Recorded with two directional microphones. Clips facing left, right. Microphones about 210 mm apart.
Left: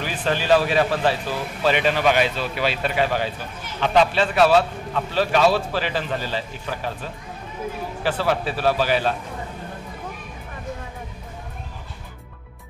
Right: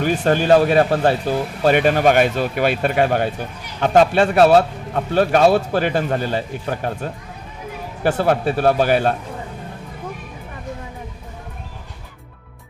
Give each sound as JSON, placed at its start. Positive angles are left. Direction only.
{"t": 0.0, "sound": "speech", "side_deg": -45}